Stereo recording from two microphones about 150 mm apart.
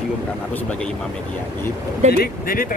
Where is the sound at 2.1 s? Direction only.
85° left.